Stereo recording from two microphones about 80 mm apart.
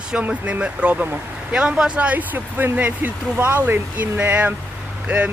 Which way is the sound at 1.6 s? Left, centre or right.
Centre.